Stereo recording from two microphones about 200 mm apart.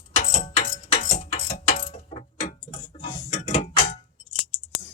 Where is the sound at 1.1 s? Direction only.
35° left (ahead or behind).